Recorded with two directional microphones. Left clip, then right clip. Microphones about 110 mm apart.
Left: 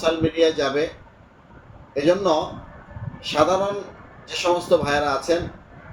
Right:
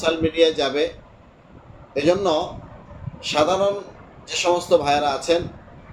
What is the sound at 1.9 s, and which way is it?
A man's voice, 25° right (ahead or behind).